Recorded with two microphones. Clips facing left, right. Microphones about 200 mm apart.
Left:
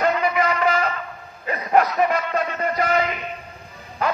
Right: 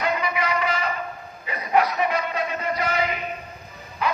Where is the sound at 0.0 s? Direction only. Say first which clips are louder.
Left 5 dB; 45° left (ahead or behind).